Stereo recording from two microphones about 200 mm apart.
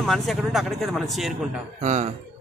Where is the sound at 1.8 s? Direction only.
40° right (ahead or behind).